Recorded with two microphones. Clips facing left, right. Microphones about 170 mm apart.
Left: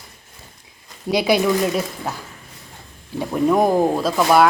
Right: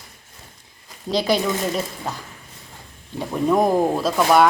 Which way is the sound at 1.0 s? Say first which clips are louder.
Left 3 dB; 10° left (ahead or behind).